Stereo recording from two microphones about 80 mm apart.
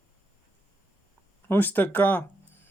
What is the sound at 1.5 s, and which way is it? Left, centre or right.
Speech, left.